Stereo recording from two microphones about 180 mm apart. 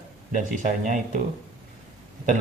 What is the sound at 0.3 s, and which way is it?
Speech, 45° right (ahead or behind).